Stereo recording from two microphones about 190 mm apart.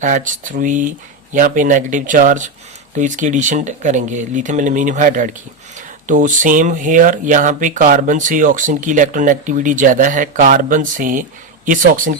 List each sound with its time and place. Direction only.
0.0 s speech: 45° right (ahead or behind)